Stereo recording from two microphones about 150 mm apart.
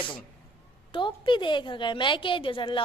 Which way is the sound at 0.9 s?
35° left (ahead or behind).